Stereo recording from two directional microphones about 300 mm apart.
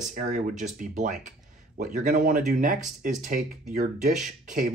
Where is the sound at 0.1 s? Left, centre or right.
Right.